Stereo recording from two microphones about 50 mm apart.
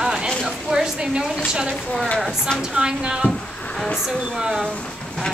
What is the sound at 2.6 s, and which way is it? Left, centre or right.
A woman's voice, centre.